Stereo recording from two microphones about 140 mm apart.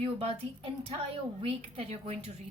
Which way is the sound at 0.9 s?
45° right (ahead or behind).